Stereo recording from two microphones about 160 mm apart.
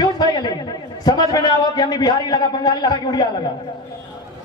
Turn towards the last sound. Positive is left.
turn(degrees=25)  # may be behind; listen again after turning